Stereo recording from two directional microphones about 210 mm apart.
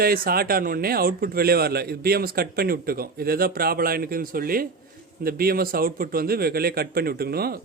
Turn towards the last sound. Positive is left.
turn(degrees=-45)  # may be behind; listen again after turning